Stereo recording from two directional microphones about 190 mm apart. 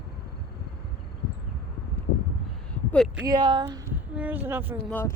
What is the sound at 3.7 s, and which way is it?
A woman's voice, 10° right (ahead or behind).